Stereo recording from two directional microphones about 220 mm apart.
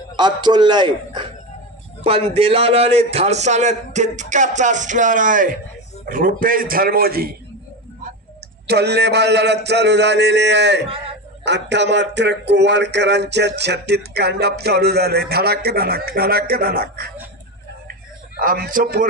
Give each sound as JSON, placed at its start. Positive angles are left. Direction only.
{"t": 0.1, "sound": "a man's voice", "side_deg": -20}
{"t": 8.6, "sound": "speech", "side_deg": -50}
{"t": 18.4, "sound": "a man's voice", "side_deg": -40}